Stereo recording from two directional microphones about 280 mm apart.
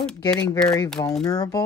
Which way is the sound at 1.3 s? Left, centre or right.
Centre.